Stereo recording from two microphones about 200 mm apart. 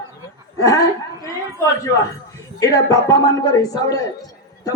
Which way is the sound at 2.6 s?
15° left (ahead or behind).